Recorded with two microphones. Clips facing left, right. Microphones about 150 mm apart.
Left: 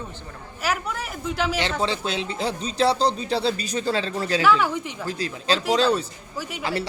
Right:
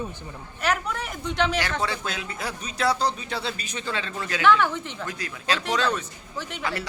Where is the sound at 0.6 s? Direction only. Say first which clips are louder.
Even; 5° left (ahead or behind).